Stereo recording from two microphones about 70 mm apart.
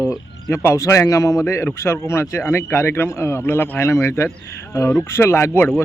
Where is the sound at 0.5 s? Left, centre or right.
Left.